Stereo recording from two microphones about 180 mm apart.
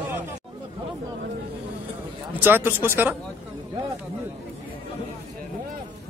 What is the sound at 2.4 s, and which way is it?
Speech, 10° right (ahead or behind).